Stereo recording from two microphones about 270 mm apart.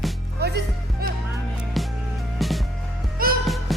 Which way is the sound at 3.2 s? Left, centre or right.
Right.